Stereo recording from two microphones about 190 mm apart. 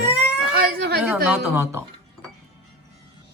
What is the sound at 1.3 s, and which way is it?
Speech, 10° right (ahead or behind).